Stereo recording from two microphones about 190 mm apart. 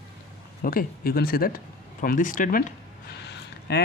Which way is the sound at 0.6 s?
50° left (ahead or behind).